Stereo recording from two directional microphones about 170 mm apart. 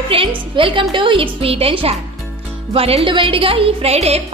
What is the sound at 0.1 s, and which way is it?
A woman's voice, 35° right (ahead or behind).